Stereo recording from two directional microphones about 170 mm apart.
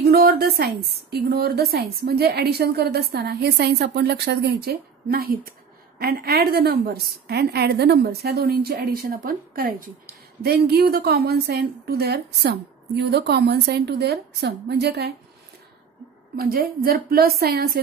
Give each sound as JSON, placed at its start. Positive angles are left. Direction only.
{"t": 0.0, "sound": "a woman's voice", "side_deg": -65}
{"t": 16.3, "sound": "a woman's voice", "side_deg": -60}